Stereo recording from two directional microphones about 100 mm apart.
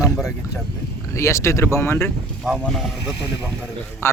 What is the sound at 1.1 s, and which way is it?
Speech, 30° left (ahead or behind).